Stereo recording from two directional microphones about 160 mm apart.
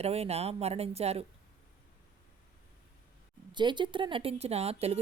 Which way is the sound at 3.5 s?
30° right (ahead or behind).